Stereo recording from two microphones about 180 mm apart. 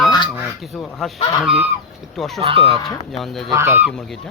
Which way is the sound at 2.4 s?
30° right (ahead or behind).